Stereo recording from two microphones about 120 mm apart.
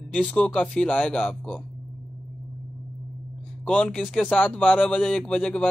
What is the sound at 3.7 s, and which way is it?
A man's voice, 5° left (ahead or behind).